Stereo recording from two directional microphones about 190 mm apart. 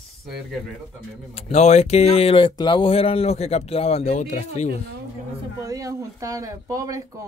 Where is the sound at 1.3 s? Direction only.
35° left (ahead or behind).